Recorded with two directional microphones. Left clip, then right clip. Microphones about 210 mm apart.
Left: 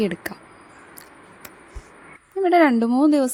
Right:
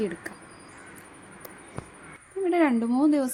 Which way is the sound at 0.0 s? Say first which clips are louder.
Left 6 dB; 45° left (ahead or behind).